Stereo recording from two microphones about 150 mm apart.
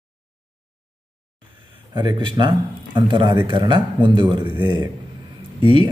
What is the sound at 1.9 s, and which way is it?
Speech, 30° right (ahead or behind).